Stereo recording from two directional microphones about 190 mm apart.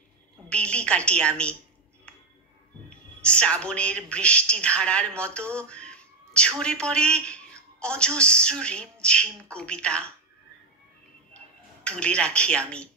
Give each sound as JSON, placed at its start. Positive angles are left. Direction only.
{"t": 0.5, "sound": "a woman's voice", "side_deg": 5}
{"t": 3.2, "sound": "a woman's voice", "side_deg": 5}
{"t": 11.8, "sound": "a woman's voice", "side_deg": 5}